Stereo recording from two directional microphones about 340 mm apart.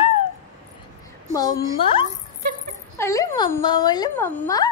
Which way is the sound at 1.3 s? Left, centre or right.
Centre.